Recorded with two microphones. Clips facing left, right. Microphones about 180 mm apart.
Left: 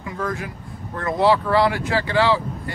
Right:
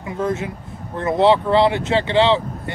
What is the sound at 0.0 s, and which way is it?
Speech, 25° right (ahead or behind).